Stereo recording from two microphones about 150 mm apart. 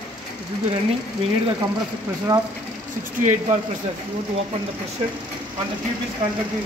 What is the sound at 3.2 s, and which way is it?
Speech, 55° right (ahead or behind).